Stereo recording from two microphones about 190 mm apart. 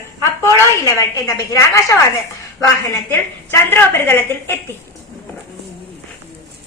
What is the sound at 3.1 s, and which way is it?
A woman's voice, 10° left (ahead or behind).